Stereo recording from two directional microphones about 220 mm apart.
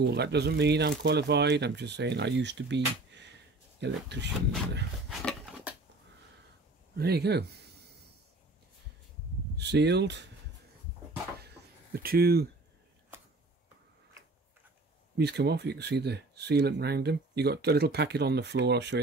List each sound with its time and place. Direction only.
0.0 s speech: 50° right (ahead or behind)
5.2 s a sound: centre (ahead or behind)
7.0 s speech: 45° right (ahead or behind)
9.6 s speech: 50° right (ahead or behind)
11.4 s a sound: 45° right (ahead or behind)
15.1 s speech: 50° right (ahead or behind)